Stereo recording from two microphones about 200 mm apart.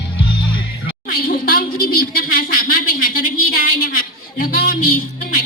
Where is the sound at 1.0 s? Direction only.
45° left (ahead or behind).